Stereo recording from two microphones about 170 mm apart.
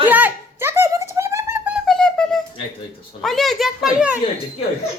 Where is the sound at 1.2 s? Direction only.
15° right (ahead or behind).